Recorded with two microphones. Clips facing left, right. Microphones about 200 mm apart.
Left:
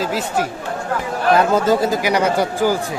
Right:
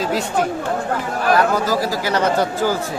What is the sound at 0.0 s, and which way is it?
Speech, 5° left (ahead or behind).